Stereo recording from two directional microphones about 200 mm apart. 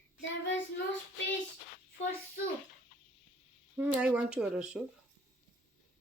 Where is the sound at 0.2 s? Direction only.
65° left (ahead or behind).